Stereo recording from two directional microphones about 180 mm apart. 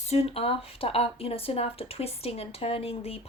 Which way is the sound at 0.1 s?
35° left (ahead or behind).